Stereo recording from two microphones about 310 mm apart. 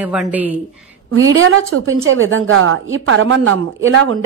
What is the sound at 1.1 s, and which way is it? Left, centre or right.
Speech, right.